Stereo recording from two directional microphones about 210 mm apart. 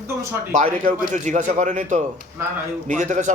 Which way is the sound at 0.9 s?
35° right (ahead or behind).